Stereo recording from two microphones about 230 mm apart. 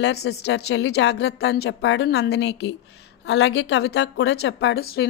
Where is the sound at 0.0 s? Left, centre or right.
Left.